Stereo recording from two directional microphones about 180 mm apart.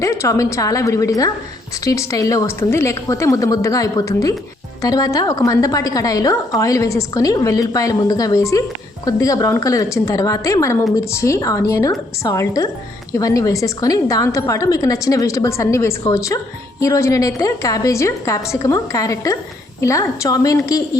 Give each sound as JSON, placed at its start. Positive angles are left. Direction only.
{"t": 0.0, "sound": "a woman's voice", "side_deg": 15}